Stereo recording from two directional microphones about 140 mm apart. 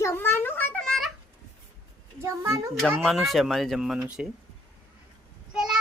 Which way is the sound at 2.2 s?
20° right (ahead or behind).